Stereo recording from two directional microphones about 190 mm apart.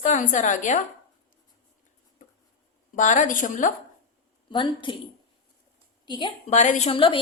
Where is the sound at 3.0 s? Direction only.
40° left (ahead or behind).